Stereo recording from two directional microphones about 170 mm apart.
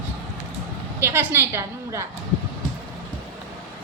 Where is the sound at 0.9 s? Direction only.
15° right (ahead or behind).